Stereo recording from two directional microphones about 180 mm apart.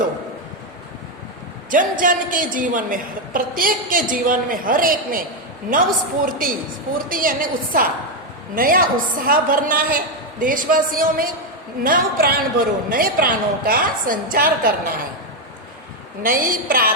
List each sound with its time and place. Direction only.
1.7 s a woman's voice: 50° right (ahead or behind)
6.2 s a woman's voice: 50° right (ahead or behind)
16.2 s a woman's voice: 55° right (ahead or behind)